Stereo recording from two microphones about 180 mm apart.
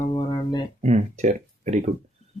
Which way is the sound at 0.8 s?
40° right (ahead or behind).